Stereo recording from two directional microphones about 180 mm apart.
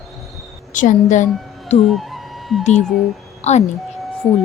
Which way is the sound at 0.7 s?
45° left (ahead or behind).